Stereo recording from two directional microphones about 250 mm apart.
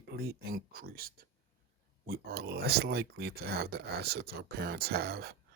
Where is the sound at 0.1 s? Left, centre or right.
Right.